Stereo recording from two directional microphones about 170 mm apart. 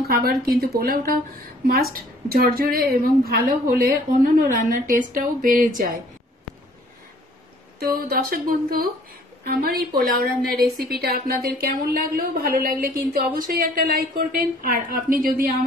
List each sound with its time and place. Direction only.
0.1 s a woman's voice: 65° right (ahead or behind)
7.8 s a woman's voice: 60° right (ahead or behind)